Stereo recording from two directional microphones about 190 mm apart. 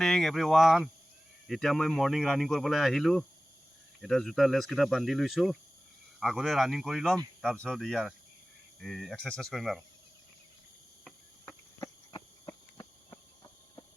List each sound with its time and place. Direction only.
0.0 s speech: centre (ahead or behind)
11.8 s cricket: 20° left (ahead or behind)